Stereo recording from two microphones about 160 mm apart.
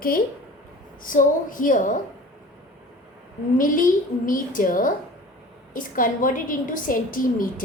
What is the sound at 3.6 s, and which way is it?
A woman's voice, 60° left (ahead or behind).